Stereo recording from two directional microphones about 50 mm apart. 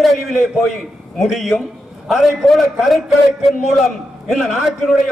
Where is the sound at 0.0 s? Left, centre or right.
Centre.